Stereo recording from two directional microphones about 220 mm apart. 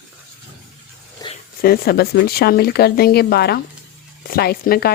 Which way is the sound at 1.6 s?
45° left (ahead or behind).